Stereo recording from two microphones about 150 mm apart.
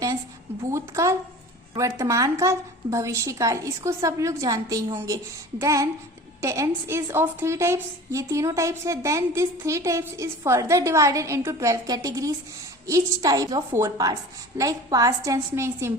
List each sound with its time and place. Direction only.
0.6 s a woman's voice: 20° right (ahead or behind)